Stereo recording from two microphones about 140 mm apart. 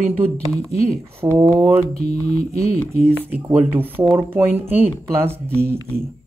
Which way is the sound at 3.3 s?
10° right (ahead or behind).